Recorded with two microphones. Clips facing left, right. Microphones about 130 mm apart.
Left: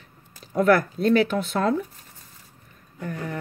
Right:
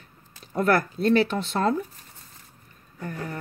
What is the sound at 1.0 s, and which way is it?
Speech, 5° right (ahead or behind).